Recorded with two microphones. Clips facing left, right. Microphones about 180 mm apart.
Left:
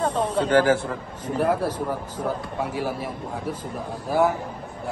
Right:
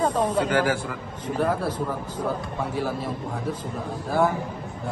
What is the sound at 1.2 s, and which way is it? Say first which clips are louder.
A man's voice: left 2 dB; 10° left (ahead or behind).